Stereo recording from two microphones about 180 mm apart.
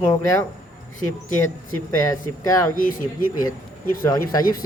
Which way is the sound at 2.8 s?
50° left (ahead or behind).